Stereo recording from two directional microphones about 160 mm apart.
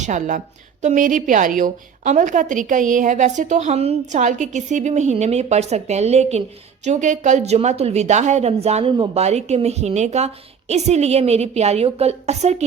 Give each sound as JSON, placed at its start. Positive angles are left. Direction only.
{"t": 0.0, "sound": "a woman's voice", "side_deg": -50}